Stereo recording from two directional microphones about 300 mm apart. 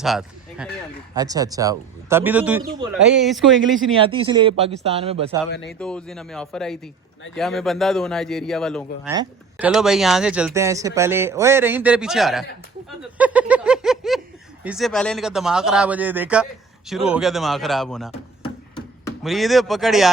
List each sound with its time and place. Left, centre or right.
0.0 s speech: centre
4.0 s speech: centre
5.6 s speech: centre
13.1 s a sound: centre
14.6 s speech: centre
19.2 s speech: centre